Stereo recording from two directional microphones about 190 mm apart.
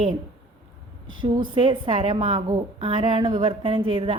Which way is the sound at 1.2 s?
25° right (ahead or behind).